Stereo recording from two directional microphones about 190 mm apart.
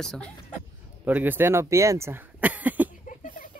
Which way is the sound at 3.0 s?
45° left (ahead or behind).